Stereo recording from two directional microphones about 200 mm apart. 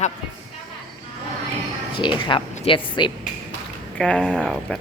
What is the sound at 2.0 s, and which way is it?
Speech, 20° left (ahead or behind).